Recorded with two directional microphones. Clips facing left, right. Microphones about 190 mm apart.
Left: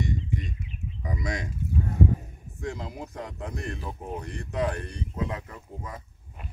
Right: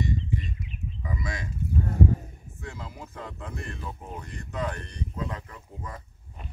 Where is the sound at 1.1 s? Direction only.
20° left (ahead or behind).